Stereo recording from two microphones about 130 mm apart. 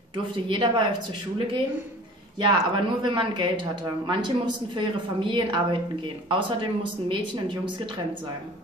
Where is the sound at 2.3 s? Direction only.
35° right (ahead or behind).